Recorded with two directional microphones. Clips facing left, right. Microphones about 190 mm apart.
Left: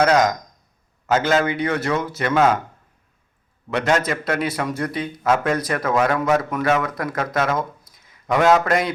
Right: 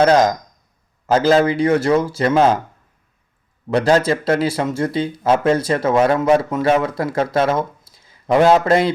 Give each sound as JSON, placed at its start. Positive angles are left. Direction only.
{"t": 0.0, "sound": "speech", "side_deg": -30}
{"t": 3.7, "sound": "speech", "side_deg": -30}